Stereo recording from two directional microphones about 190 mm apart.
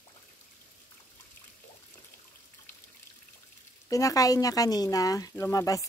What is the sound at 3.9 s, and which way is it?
Speech, 20° left (ahead or behind).